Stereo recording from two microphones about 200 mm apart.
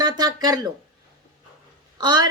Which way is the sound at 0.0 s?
20° right (ahead or behind).